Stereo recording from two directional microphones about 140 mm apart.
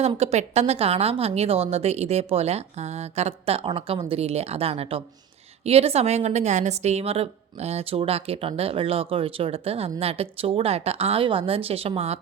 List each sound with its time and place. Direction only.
0.2 s a woman's voice: 50° right (ahead or behind)